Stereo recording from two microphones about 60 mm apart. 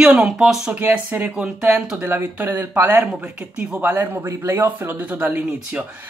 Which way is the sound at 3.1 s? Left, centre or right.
Centre.